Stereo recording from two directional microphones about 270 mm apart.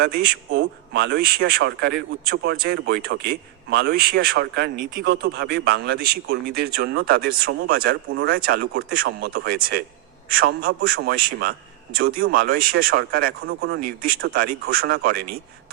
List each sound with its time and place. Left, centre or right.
0.5 s a man's voice: right